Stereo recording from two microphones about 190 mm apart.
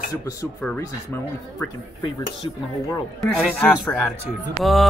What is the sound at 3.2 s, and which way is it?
Speech, centre (ahead or behind).